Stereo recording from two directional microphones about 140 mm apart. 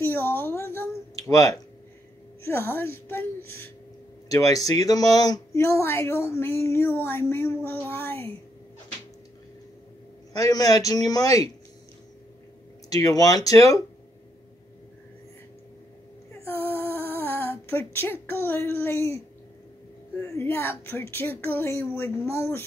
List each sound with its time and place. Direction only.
0.0 s a sound: 15° left (ahead or behind)
2.4 s speech: 15° left (ahead or behind)
10.3 s speech: 25° left (ahead or behind)
12.9 s speech: 25° left (ahead or behind)
16.4 s a sound: 15° left (ahead or behind)
20.2 s speech: 15° left (ahead or behind)